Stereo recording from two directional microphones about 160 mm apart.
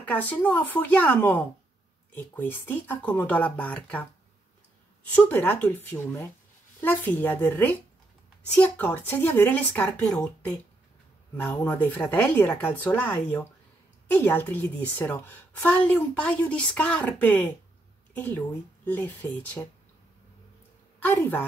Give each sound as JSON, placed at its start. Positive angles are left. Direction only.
{"t": 0.0, "sound": "a woman's voice", "side_deg": 10}
{"t": 5.1, "sound": "a woman's voice", "side_deg": 10}
{"t": 21.0, "sound": "a woman's voice", "side_deg": 10}